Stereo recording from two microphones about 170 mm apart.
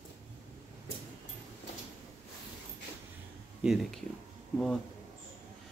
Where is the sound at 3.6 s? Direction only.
Centre (ahead or behind).